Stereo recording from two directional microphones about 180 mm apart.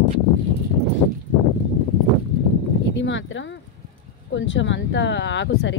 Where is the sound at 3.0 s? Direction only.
90° left.